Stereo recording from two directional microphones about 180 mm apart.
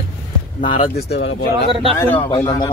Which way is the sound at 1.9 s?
10° left (ahead or behind).